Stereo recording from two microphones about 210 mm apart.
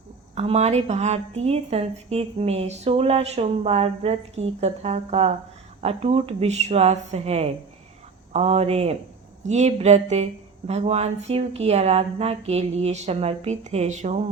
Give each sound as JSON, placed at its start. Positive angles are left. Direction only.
{"t": 0.3, "sound": "a woman's voice", "side_deg": -30}